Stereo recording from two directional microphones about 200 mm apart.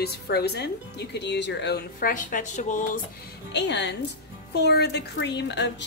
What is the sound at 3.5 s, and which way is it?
A woman's voice, 60° left (ahead or behind).